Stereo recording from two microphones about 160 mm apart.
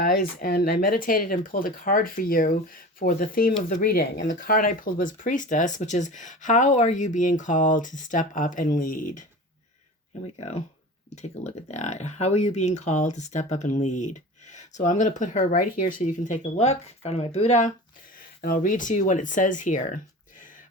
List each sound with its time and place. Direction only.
0.0 s speech: 70° left (ahead or behind)
10.3 s speech: 40° left (ahead or behind)
18.2 s speech: 60° left (ahead or behind)